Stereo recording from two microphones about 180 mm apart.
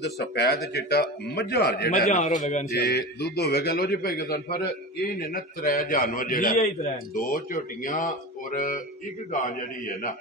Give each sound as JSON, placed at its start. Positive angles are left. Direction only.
{"t": 0.0, "sound": "a man's voice", "side_deg": 65}
{"t": 2.0, "sound": "speech", "side_deg": 45}
{"t": 2.7, "sound": "a man's voice", "side_deg": 65}